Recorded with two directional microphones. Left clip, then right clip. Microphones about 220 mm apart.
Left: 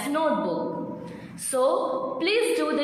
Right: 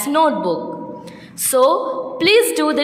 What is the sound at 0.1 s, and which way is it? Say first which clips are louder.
Speech: right 9 dB; 50° right (ahead or behind).